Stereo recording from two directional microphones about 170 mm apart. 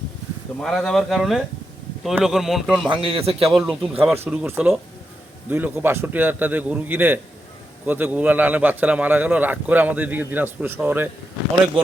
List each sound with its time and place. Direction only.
0.6 s speech: 5° left (ahead or behind)
2.8 s a man's voice: 30° right (ahead or behind)
3.5 s speech: centre (ahead or behind)
4.0 s a man's voice: 15° right (ahead or behind)